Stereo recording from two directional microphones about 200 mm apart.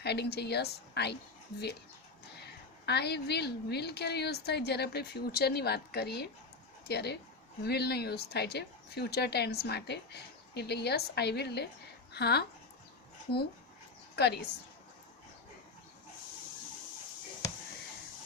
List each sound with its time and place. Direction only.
0.0 s a woman's voice: 55° left (ahead or behind)
2.4 s a woman's voice: 55° left (ahead or behind)